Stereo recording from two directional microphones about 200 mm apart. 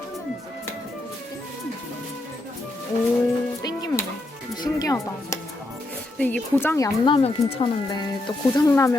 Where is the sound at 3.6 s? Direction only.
20° left (ahead or behind).